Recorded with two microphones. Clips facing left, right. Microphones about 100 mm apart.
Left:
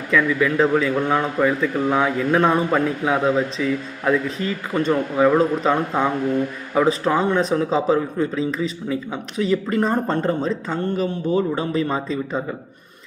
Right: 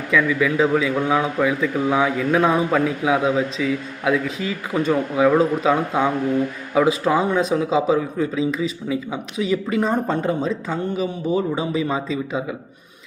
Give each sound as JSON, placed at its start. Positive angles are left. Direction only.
{"t": 0.1, "sound": "speech", "side_deg": -5}